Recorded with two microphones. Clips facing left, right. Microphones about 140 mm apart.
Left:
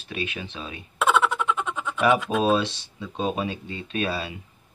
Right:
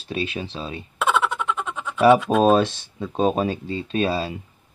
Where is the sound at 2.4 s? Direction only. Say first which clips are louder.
Right 5 dB; 50° right (ahead or behind).